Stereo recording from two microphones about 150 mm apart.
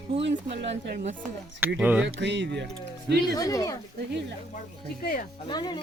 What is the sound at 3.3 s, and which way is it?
Speech, 25° left (ahead or behind).